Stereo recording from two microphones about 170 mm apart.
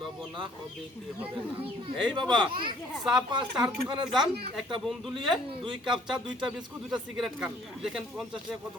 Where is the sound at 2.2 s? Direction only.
25° right (ahead or behind).